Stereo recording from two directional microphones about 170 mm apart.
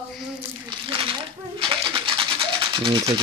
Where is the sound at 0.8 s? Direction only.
30° right (ahead or behind).